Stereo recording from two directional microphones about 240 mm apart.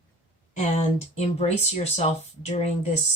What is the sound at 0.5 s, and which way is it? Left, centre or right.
Speech, left.